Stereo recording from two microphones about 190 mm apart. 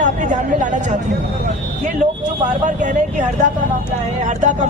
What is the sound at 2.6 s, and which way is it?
Speech, 40° right (ahead or behind).